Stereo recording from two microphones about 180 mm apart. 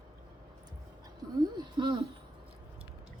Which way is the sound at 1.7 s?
25° right (ahead or behind).